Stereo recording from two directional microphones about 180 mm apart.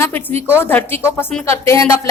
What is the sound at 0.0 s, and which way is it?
A woman's voice, 10° left (ahead or behind).